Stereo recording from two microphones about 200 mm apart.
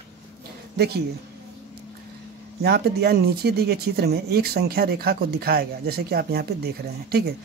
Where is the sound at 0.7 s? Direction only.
55° right (ahead or behind).